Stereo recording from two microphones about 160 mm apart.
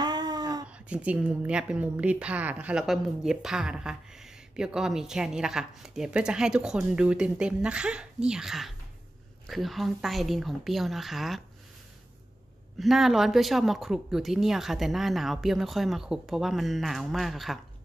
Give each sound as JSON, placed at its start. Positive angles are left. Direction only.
{"t": 0.0, "sound": "a sound", "side_deg": -25}
{"t": 0.7, "sound": "a woman's voice", "side_deg": -5}
{"t": 12.7, "sound": "a woman's voice", "side_deg": 0}